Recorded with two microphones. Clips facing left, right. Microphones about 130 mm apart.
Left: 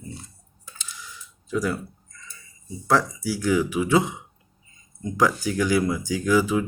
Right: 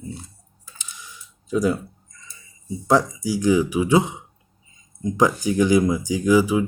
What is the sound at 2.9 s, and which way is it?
Speech, 15° right (ahead or behind).